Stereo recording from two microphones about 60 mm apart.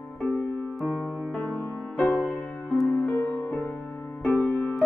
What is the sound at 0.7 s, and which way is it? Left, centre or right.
Music, centre.